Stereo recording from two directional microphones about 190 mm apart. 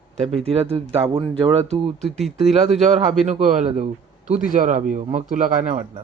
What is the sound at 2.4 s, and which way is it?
Speech, centre (ahead or behind).